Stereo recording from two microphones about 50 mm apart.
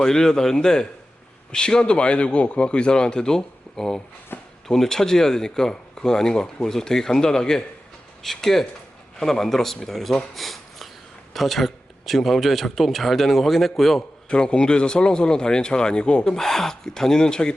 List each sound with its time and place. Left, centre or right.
0.0 s speech: centre
4.3 s a sound: left
4.7 s speech: centre
10.3 s a sound: centre
11.3 s speech: centre
14.3 s speech: left
16.3 s speech: centre